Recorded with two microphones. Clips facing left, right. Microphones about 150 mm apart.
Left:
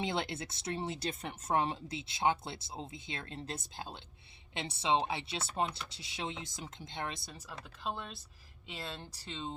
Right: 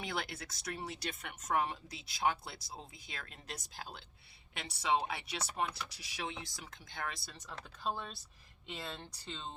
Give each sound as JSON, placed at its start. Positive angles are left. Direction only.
{"t": 0.0, "sound": "speech", "side_deg": 25}
{"t": 7.3, "sound": "speech", "side_deg": 5}